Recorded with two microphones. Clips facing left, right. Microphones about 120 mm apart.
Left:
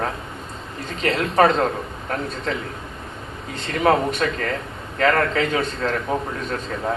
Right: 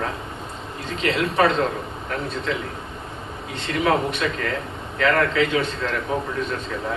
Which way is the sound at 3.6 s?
40° left (ahead or behind).